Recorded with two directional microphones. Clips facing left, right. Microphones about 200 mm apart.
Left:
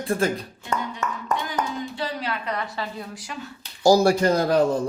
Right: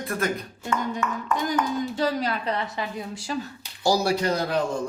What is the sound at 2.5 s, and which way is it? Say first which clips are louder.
Speech: right 1 dB; 20° right (ahead or behind).